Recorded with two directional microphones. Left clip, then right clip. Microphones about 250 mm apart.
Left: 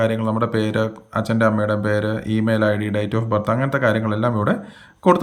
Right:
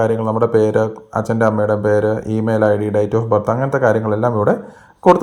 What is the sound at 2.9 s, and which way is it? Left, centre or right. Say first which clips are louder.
Speech: right 6 dB; centre.